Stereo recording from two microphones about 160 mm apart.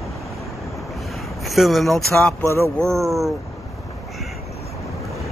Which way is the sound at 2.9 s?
Centre (ahead or behind).